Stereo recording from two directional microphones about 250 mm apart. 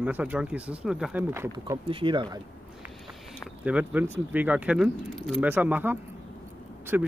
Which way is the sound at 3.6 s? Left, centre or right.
Centre.